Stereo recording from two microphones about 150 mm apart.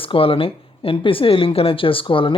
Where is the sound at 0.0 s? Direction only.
35° left (ahead or behind).